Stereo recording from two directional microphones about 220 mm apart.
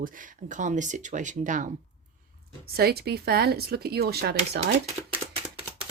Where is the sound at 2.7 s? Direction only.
45° right (ahead or behind).